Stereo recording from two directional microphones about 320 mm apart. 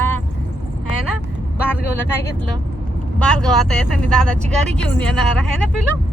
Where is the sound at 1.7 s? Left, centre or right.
Centre.